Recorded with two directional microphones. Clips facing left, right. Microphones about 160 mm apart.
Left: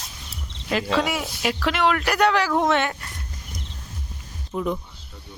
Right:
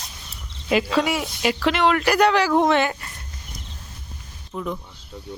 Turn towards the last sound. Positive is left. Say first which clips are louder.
# left 3 dB
turn(degrees=10)  # may be behind; listen again after turning